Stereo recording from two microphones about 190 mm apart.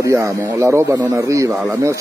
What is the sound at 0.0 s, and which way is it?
Speech, 15° right (ahead or behind).